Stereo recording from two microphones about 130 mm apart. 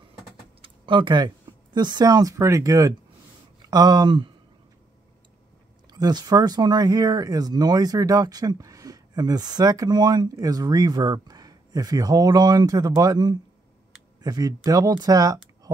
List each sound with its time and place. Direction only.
0.6 s speech: 40° right (ahead or behind)
5.9 s speech: 30° right (ahead or behind)